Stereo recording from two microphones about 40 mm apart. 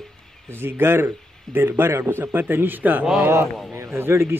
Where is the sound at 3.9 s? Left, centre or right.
Right.